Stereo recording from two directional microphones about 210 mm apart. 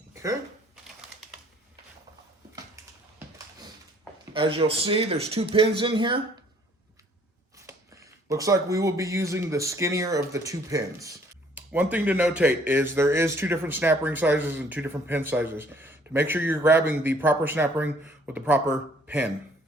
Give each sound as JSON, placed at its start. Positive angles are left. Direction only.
{"t": 0.1, "sound": "a sound", "side_deg": -15}
{"t": 4.4, "sound": "speech", "side_deg": -25}
{"t": 7.5, "sound": "a man's voice", "side_deg": -15}